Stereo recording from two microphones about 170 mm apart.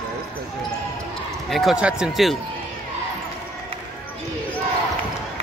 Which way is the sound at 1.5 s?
Centre (ahead or behind).